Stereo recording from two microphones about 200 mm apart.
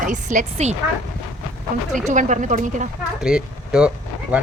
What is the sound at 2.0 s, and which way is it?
Speech, 40° right (ahead or behind).